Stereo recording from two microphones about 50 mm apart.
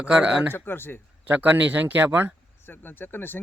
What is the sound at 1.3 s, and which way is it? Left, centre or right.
Speech, right.